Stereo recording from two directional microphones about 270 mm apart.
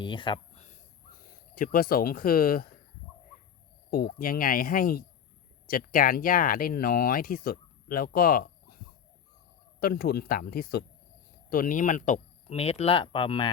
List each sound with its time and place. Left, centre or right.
0.0 s speech: centre
1.3 s speech: left
3.9 s speech: left
9.8 s speech: left; by 13.5 s centre